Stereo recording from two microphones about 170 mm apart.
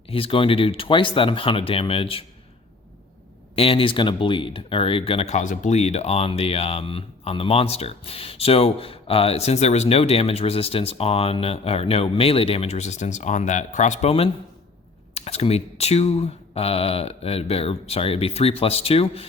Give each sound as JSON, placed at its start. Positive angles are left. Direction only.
{"t": 0.1, "sound": "speech", "side_deg": 30}
{"t": 3.5, "sound": "speech", "side_deg": 35}